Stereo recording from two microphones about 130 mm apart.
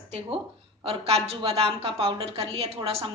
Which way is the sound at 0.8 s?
50° right (ahead or behind).